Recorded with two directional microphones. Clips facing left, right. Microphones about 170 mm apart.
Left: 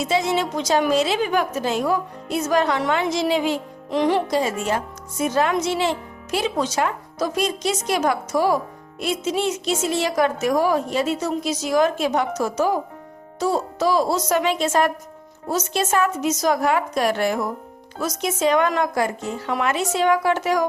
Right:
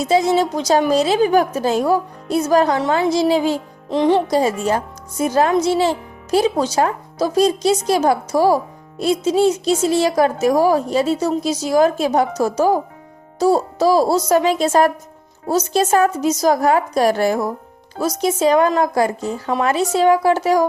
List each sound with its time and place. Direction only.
0.0 s a woman's voice: 35° right (ahead or behind)